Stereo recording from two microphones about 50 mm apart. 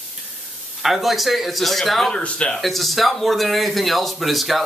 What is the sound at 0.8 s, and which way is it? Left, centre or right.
Speech, centre.